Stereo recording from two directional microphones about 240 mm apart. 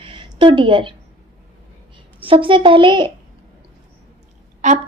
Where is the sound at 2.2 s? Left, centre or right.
Right.